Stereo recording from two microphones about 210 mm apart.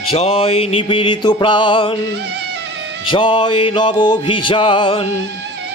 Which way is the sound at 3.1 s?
25° left (ahead or behind).